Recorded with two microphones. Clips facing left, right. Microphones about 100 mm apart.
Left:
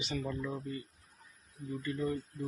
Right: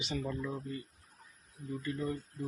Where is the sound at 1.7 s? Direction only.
15° right (ahead or behind).